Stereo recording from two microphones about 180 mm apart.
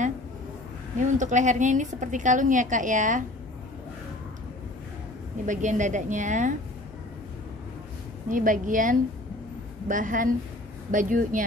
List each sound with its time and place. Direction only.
0.9 s a woman's voice: 45° right (ahead or behind)
5.5 s a woman's voice: 45° right (ahead or behind)
8.3 s a woman's voice: 50° right (ahead or behind)